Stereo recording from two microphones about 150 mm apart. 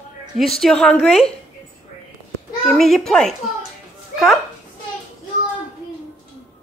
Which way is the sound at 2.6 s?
Centre (ahead or behind).